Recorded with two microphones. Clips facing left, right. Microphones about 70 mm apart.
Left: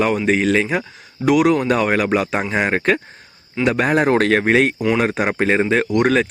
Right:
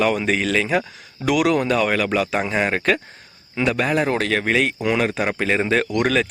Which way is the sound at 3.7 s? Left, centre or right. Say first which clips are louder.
Left 5 dB; left.